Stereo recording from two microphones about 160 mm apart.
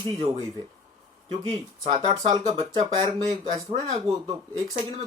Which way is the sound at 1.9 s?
40° right (ahead or behind).